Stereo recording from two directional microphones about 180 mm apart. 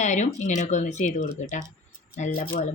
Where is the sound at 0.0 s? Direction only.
40° left (ahead or behind).